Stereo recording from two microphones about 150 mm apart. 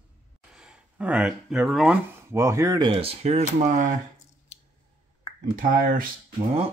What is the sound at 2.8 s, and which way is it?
Speech, 40° right (ahead or behind).